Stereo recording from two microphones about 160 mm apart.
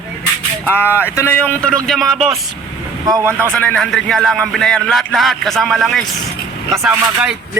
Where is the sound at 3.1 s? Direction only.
20° right (ahead or behind).